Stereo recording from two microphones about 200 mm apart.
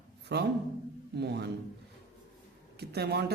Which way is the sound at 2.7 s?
55° right (ahead or behind).